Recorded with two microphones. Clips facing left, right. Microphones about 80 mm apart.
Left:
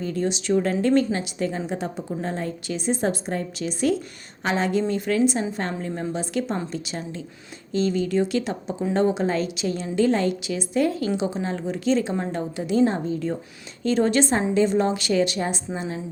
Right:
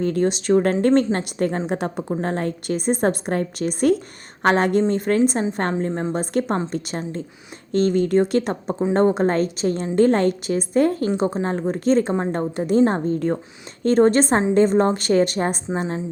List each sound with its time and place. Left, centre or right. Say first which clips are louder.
0.0 s a woman's voice: right 5 dB; right
4.9 s a woman's voice: right 3 dB; right